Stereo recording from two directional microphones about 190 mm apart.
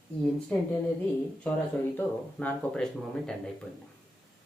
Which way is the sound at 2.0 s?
10° left (ahead or behind).